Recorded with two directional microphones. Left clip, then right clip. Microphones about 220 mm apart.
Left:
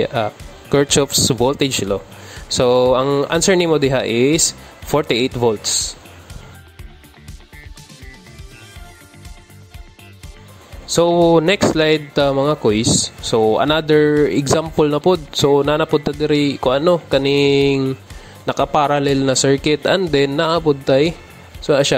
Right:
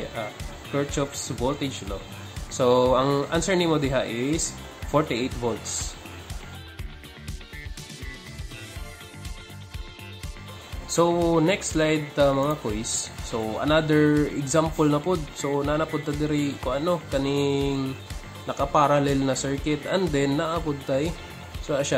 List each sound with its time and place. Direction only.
0.1 s speech: 45° left (ahead or behind)
5.4 s speech: 35° left (ahead or behind)
10.9 s speech: 30° left (ahead or behind)
11.3 s speech: 45° left (ahead or behind)